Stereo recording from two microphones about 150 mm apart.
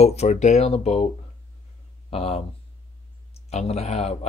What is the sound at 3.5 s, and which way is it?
Speech, 45° left (ahead or behind).